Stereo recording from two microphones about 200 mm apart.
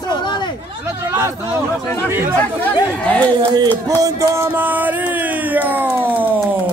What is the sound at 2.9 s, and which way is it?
Speech, 5° left (ahead or behind).